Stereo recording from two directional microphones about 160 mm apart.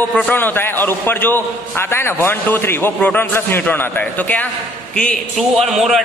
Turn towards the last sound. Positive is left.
turn(degrees=0)  # may be behind; listen again after turning